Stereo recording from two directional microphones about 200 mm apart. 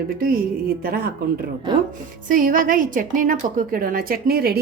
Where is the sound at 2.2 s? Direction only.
45° right (ahead or behind).